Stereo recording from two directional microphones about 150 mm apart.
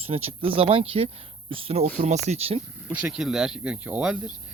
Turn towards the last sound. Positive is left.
turn(degrees=-10)  # may be behind; listen again after turning